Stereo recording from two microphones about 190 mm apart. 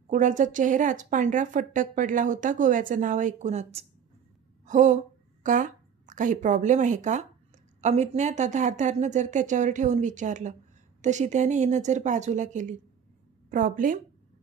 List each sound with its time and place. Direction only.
0.1 s a woman's voice: 40° right (ahead or behind)